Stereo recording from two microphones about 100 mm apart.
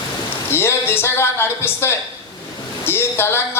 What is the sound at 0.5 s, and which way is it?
A man's voice, 25° left (ahead or behind).